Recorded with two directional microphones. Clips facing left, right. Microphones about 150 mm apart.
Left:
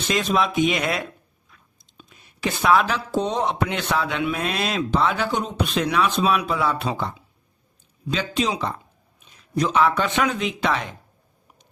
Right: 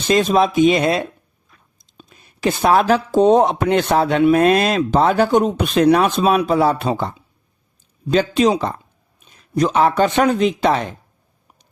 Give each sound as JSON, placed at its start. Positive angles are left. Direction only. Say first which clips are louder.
{"t": 0.1, "sound": "speech", "louder": "right 7 dB", "side_deg": -35}
{"t": 8.1, "sound": "speech", "louder": "right 9 dB", "side_deg": -45}